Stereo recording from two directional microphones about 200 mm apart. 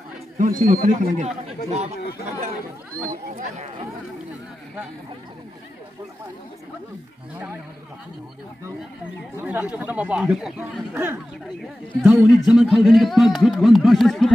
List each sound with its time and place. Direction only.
0.4 s a man's voice: 40° right (ahead or behind)
1.7 s a man's voice: 30° right (ahead or behind)
3.0 s a man's voice: 40° right (ahead or behind)
9.4 s a man's voice: 5° right (ahead or behind)